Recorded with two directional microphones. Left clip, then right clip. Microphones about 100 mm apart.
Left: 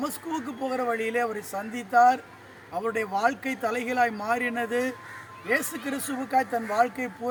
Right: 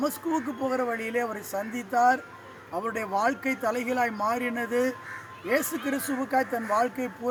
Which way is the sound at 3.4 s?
15° left (ahead or behind).